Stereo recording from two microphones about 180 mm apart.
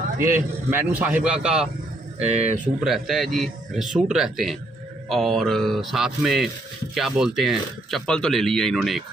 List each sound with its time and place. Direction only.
0.7 s a man's voice: 10° right (ahead or behind)
2.1 s speech: 35° right (ahead or behind)
2.8 s speech: centre (ahead or behind)